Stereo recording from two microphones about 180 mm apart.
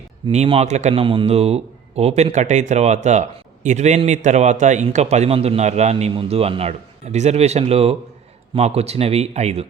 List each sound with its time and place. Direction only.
0.3 s a man's voice: 35° right (ahead or behind)